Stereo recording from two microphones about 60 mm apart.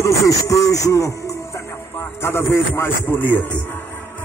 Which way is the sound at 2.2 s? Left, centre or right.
Left.